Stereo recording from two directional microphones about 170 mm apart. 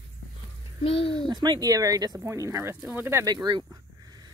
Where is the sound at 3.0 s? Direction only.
20° right (ahead or behind).